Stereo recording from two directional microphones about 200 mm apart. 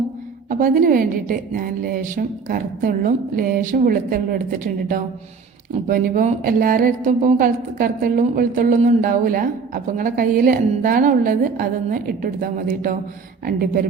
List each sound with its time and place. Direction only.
0.6 s a woman's voice: 45° right (ahead or behind)